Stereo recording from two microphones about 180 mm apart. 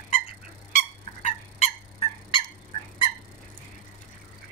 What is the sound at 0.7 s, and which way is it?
Fowl, 40° left (ahead or behind).